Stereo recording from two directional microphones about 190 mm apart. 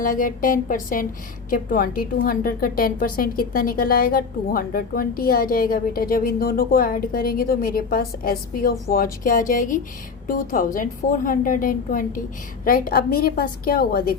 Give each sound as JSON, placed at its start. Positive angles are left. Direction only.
{"t": 0.0, "sound": "a woman's voice", "side_deg": 45}